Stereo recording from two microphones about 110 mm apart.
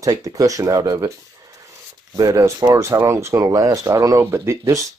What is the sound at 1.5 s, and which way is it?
Rub, 30° right (ahead or behind).